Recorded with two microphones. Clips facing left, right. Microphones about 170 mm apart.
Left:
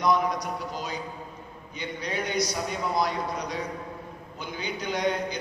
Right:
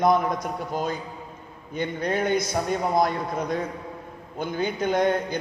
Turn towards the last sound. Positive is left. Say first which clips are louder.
# right 5 dB
turn(degrees=-50)  # may be behind; listen again after turning